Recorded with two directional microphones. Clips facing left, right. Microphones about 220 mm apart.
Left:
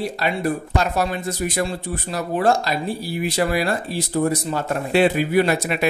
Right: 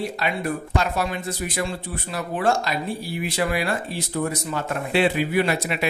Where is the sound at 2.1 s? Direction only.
40° left (ahead or behind).